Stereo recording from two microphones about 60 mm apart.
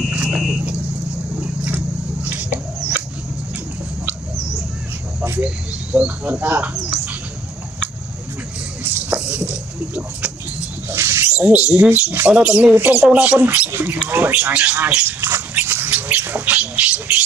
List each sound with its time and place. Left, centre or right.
0.3 s smoke detector: centre
1.4 s vehicle: right
2.2 s a sound: right
5.4 s speech: right
9.1 s a sound: centre
10.9 s a sound: right
11.3 s speech: right
12.4 s speech: centre
13.7 s speech: right
14.3 s speech: right
15.0 s speech: right
15.5 s rodents: right
16.5 s a sound: right